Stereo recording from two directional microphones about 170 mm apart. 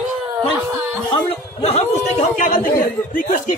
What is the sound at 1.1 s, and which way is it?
Speech, 30° left (ahead or behind).